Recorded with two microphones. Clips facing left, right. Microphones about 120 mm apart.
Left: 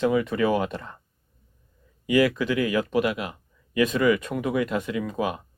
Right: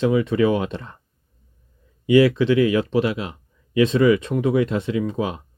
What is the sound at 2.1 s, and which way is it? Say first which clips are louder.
Speech: right 6 dB; 25° right (ahead or behind).